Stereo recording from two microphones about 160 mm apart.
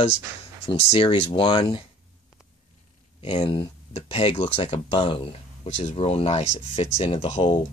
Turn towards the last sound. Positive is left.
turn(degrees=35)  # may be behind; listen again after turning